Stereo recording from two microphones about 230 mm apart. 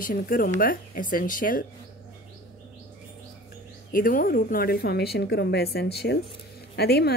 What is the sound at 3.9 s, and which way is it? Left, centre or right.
A woman's voice, left.